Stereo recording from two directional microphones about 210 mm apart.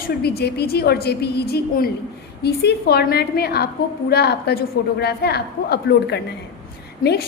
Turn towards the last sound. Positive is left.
turn(degrees=50)  # may be behind; listen again after turning